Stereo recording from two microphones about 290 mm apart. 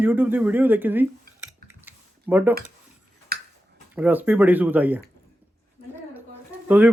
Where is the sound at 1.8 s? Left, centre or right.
Centre.